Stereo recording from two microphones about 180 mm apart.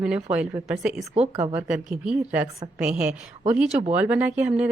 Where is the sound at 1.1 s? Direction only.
35° right (ahead or behind).